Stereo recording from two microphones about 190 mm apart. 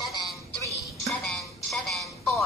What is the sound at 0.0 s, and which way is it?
Music, centre (ahead or behind).